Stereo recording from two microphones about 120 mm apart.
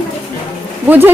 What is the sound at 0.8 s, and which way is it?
Speech, 15° right (ahead or behind).